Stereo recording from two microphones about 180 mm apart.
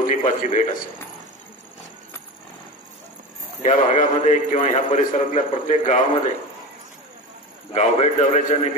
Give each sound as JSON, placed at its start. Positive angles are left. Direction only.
{"t": 0.0, "sound": "a man's voice", "side_deg": 45}
{"t": 3.6, "sound": "a man's voice", "side_deg": 40}
{"t": 7.7, "sound": "a man's voice", "side_deg": 40}